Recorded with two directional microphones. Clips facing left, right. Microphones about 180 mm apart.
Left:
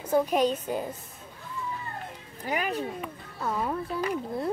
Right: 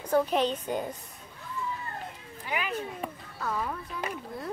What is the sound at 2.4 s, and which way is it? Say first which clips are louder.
Speech: left 4 dB; 40° left (ahead or behind).